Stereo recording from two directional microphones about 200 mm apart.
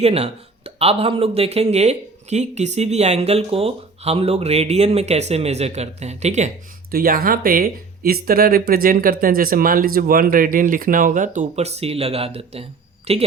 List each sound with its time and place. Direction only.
0.0 s speech: 30° right (ahead or behind)
6.9 s speech: 45° right (ahead or behind); by 13.2 s 30° right (ahead or behind)